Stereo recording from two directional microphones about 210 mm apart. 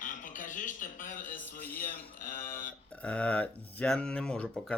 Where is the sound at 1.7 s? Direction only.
40° left (ahead or behind).